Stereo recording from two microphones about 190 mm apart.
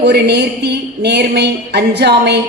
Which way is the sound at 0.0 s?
60° right (ahead or behind).